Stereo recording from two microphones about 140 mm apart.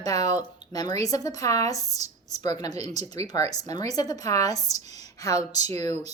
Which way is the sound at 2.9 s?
50° right (ahead or behind).